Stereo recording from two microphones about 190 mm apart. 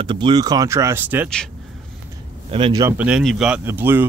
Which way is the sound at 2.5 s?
25° right (ahead or behind).